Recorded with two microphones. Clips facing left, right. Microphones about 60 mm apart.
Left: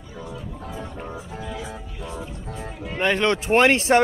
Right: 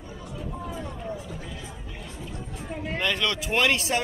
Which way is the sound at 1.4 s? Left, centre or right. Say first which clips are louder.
Left 7 dB; left.